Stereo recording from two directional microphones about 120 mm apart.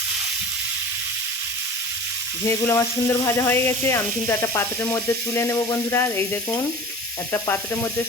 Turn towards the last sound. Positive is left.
turn(degrees=20)  # may be behind; listen again after turning